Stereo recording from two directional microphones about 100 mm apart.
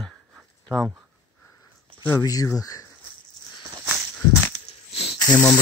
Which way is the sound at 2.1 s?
35° left (ahead or behind).